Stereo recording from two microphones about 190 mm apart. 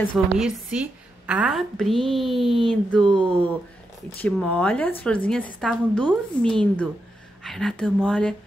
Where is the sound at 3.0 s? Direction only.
25° right (ahead or behind).